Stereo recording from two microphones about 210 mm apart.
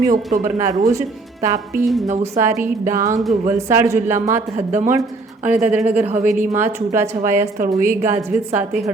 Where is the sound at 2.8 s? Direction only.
15° right (ahead or behind).